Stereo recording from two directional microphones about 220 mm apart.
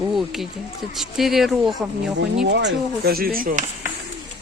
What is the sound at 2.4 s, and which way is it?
Speech, 50° right (ahead or behind).